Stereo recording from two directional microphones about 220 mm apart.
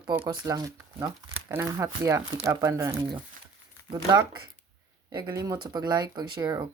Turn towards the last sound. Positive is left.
turn(degrees=-20)  # may be behind; listen again after turning